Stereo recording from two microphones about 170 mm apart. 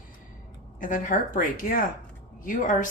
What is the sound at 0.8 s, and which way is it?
Speech, 50° left (ahead or behind).